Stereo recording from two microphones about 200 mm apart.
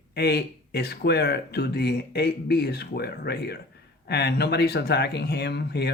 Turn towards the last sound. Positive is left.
turn(degrees=55)  # may be behind; listen again after turning